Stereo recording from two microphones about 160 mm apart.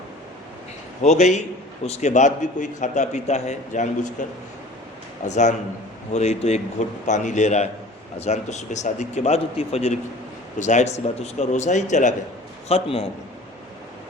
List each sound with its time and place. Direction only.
1.0 s a man's voice: 45° left (ahead or behind)
5.2 s a man's voice: 50° left (ahead or behind)
12.6 s a man's voice: 40° left (ahead or behind)